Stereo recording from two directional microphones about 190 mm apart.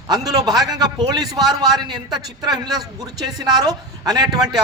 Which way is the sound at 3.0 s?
20° right (ahead or behind).